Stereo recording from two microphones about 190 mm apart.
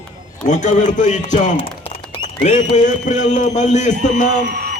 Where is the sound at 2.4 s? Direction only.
40° left (ahead or behind).